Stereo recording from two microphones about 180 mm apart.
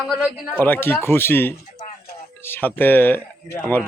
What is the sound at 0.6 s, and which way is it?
Speech, 10° left (ahead or behind).